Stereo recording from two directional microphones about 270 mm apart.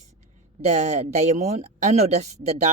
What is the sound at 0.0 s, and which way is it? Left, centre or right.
Speech, right.